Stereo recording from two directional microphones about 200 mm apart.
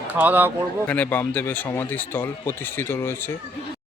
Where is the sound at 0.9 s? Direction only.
10° left (ahead or behind).